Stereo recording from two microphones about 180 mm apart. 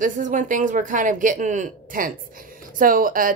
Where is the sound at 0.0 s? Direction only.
45° right (ahead or behind).